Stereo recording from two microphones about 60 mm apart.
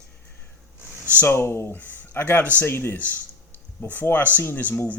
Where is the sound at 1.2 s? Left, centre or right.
Left.